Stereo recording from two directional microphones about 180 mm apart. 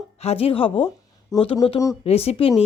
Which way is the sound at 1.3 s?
20° left (ahead or behind).